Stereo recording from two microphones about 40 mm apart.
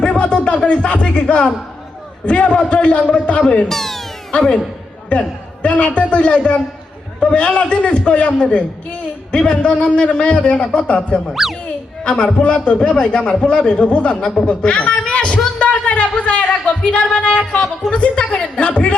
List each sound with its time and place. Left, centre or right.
0.0 s music: left
0.4 s speech: left
3.7 s speech: centre
4.3 s a man's voice: left
9.5 s speech: left
11.4 s a child's voice: centre
12.0 s a man's voice: left
14.4 s a sound: left
17.9 s speech: left